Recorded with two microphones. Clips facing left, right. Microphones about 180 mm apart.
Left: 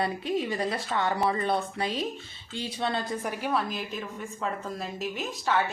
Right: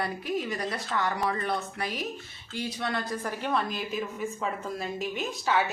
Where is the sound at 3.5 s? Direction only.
Centre (ahead or behind).